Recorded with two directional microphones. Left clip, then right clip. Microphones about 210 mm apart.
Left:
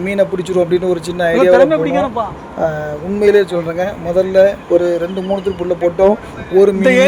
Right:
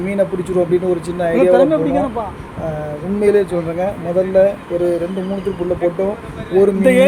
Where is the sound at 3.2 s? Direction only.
35° left (ahead or behind).